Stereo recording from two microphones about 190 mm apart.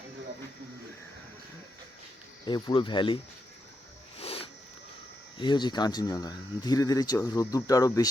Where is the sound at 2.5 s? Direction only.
25° left (ahead or behind).